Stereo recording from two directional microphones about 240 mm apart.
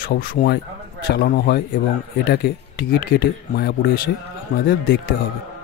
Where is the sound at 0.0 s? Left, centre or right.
Left.